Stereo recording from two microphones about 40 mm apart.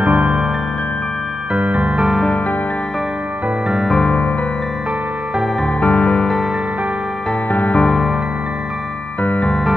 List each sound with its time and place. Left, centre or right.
0.0 s music: right
1.6 s music: right
4.0 s music: left
5.8 s music: centre
7.5 s music: left
9.2 s music: left